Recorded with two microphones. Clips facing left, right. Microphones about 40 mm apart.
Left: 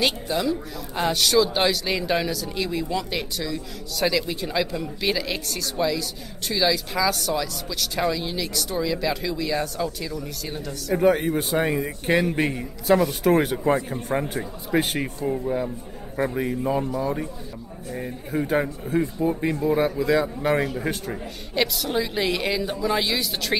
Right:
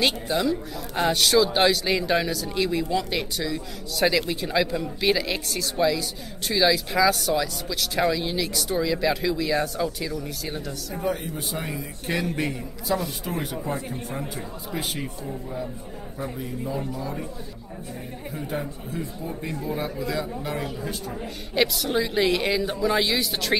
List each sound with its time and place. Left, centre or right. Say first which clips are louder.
0.0 s speech: even; centre
11.0 s speech: left 9 dB; left
12.1 s a man's voice: left 5 dB; left
12.9 s speech: left 9 dB; left
18.5 s speech: left 8 dB; left
21.5 s speech: right 1 dB; centre